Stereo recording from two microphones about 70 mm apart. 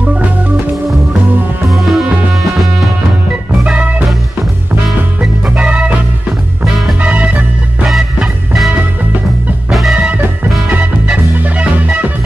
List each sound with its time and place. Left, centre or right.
1.7 s music: centre
5.6 s music: centre
7.0 s music: right
7.9 s music: centre
9.7 s music: centre
10.7 s music: right